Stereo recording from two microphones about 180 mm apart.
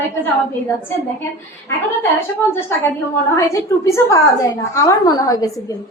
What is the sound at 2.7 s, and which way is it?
A woman's voice, 15° left (ahead or behind).